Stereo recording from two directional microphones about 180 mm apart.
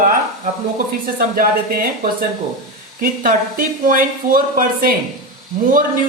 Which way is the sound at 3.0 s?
50° right (ahead or behind).